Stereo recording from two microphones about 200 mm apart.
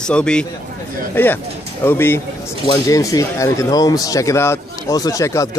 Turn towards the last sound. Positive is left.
turn(degrees=15)  # may be behind; listen again after turning